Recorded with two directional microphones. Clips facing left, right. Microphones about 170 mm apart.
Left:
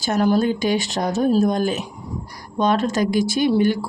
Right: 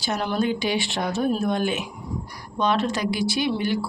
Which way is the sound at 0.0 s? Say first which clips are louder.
Left 6 dB; 45° left (ahead or behind).